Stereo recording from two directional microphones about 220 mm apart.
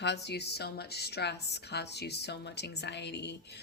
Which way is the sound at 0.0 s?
50° left (ahead or behind).